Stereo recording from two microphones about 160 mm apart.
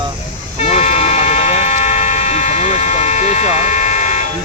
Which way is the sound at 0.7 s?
45° left (ahead or behind).